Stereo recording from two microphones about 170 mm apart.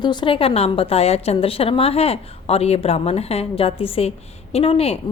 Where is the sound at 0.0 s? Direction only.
25° left (ahead or behind).